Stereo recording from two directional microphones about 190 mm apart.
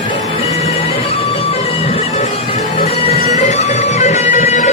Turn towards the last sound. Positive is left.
turn(degrees=40)  # may be behind; listen again after turning